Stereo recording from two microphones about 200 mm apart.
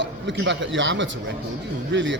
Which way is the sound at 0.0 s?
65° right (ahead or behind).